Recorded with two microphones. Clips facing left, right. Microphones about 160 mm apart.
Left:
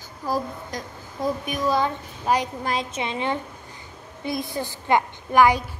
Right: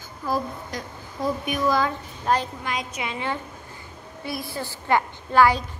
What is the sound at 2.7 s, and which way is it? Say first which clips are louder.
A woman's voice: left 3 dB; 25° left (ahead or behind).